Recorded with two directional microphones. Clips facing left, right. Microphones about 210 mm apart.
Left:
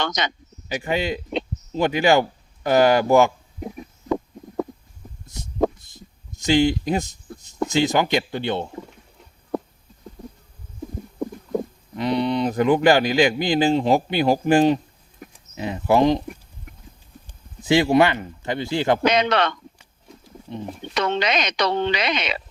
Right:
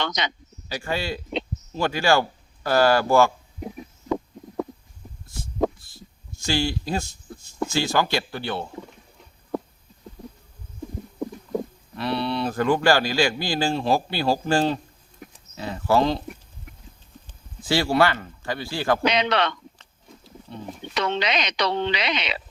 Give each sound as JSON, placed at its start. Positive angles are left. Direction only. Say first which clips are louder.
{"t": 0.0, "sound": "speech", "louder": "left 2 dB", "side_deg": 45}
{"t": 0.7, "sound": "speech", "louder": "left 4 dB", "side_deg": 20}
{"t": 5.2, "sound": "a sound", "louder": "left 2 dB", "side_deg": 20}
{"t": 11.9, "sound": "speech", "louder": "left 4 dB", "side_deg": 15}
{"t": 17.2, "sound": "speech", "louder": "left 6 dB", "side_deg": 20}
{"t": 19.0, "sound": "speech", "louder": "left 3 dB", "side_deg": 45}
{"t": 20.9, "sound": "speech", "louder": "left 2 dB", "side_deg": 50}